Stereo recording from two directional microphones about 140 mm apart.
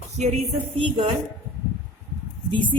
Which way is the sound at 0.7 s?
35° right (ahead or behind).